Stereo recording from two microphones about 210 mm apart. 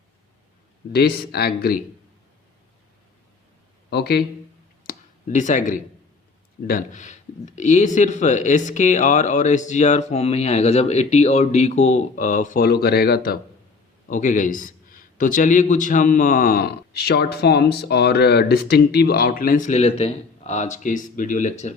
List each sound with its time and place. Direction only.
0.9 s speech: 50° left (ahead or behind)
3.8 s speech: 50° left (ahead or behind)
4.9 s a sound: 35° left (ahead or behind)
6.7 s a man's voice: 40° left (ahead or behind)